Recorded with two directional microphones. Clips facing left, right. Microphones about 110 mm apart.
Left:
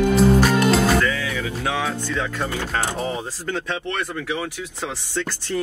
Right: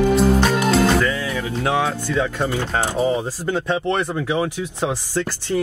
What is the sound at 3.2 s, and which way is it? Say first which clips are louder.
Speech: right 5 dB; 15° right (ahead or behind).